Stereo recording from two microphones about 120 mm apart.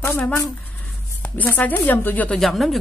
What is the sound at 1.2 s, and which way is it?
Speech, 15° left (ahead or behind).